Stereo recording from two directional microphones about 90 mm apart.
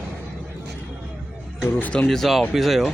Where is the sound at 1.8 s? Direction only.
15° left (ahead or behind).